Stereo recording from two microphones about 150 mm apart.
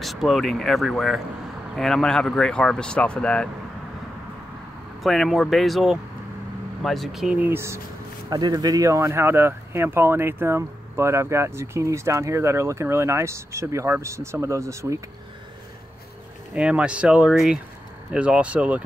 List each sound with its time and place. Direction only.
0.0 s speech: centre (ahead or behind)
5.0 s speech: centre (ahead or behind); by 7.8 s 15° right (ahead or behind)
8.3 s speech: 25° right (ahead or behind)
16.5 s speech: 5° right (ahead or behind)